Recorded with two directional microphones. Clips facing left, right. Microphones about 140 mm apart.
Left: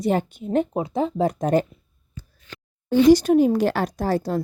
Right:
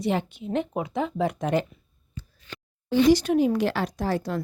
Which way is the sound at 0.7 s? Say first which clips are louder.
Left 4 dB; 35° left (ahead or behind).